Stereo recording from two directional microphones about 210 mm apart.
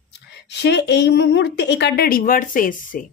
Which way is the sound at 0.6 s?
55° left (ahead or behind).